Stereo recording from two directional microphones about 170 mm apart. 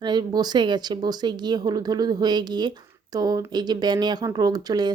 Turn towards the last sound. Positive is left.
turn(degrees=-25)  # may be behind; listen again after turning